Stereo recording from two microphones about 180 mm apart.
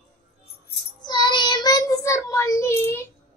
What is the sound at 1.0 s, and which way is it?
Child singing, 25° left (ahead or behind).